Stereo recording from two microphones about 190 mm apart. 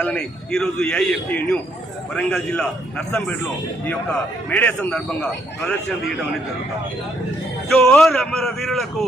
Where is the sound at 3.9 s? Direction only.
10° left (ahead or behind).